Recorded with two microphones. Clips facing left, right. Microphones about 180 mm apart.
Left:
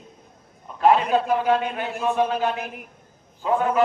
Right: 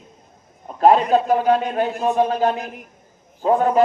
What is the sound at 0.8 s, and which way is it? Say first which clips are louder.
A man's voice: right 4 dB; 40° right (ahead or behind).